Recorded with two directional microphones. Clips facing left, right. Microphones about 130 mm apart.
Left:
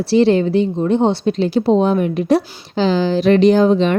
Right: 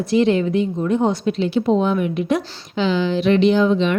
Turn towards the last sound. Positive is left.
turn(degrees=40)  # may be behind; listen again after turning